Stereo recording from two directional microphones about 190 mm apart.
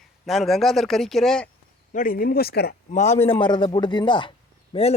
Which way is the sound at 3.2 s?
25° left (ahead or behind).